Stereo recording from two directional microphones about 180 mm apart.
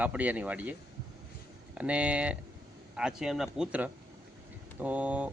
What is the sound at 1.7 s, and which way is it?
Speech, 5° right (ahead or behind).